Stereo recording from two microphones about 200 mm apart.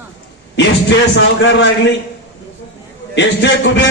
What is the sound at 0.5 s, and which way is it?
A man's voice, 60° left (ahead or behind).